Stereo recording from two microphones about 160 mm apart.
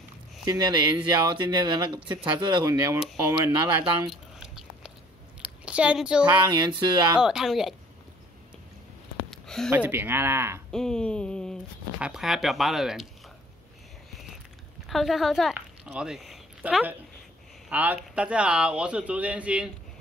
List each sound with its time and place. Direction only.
0.5 s speech: 25° right (ahead or behind)
4.1 s patter: 5° right (ahead or behind)
5.4 s a sound: 5° right (ahead or behind)
6.5 s speech: 25° right (ahead or behind)
7.2 s speech: 5° right (ahead or behind)
9.3 s a sound: centre (ahead or behind)
9.7 s speech: 15° right (ahead or behind)
10.7 s speech: 5° left (ahead or behind)
14.9 s speech: centre (ahead or behind)
15.5 s a sound: 5° right (ahead or behind)
17.6 s speech: 10° right (ahead or behind)